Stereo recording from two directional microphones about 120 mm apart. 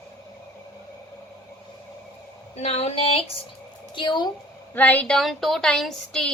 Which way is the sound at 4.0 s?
40° left (ahead or behind).